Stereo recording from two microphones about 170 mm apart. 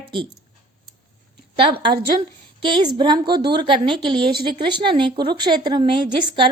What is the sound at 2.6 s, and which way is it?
A woman's voice, 30° right (ahead or behind).